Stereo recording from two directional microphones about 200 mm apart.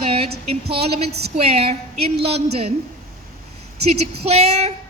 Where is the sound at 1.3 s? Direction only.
30° right (ahead or behind).